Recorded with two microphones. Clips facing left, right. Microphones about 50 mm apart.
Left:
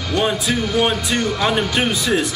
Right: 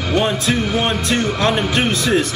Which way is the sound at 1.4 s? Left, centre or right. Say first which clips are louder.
Right 1 dB; centre.